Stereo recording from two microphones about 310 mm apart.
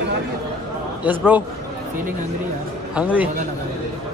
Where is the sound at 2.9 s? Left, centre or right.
Centre.